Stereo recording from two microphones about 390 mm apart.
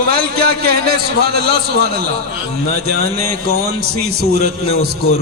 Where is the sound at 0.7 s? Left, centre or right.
Right.